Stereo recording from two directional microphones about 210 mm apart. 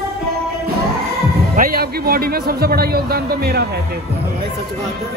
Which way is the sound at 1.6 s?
45° right (ahead or behind).